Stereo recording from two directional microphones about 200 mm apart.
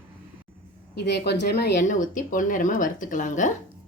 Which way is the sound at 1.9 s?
40° left (ahead or behind).